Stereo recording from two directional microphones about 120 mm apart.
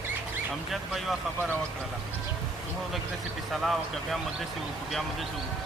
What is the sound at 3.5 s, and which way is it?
Speech, centre (ahead or behind).